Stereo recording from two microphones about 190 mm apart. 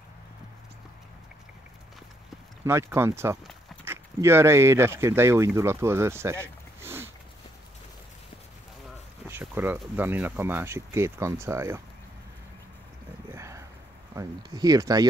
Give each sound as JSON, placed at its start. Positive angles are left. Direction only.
{"t": 2.6, "sound": "speech", "side_deg": -15}
{"t": 9.3, "sound": "speech", "side_deg": -10}
{"t": 13.3, "sound": "a sound", "side_deg": -15}
{"t": 14.1, "sound": "speech", "side_deg": -20}